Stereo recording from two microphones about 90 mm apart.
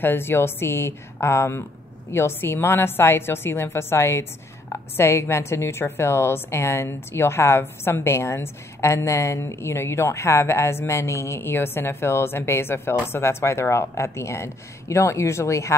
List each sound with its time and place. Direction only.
0.0 s a woman's voice: 25° left (ahead or behind)